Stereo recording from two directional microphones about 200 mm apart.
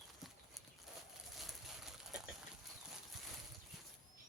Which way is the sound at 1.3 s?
Centre (ahead or behind).